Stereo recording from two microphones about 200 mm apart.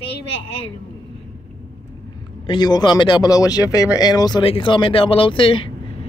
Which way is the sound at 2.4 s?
20° left (ahead or behind).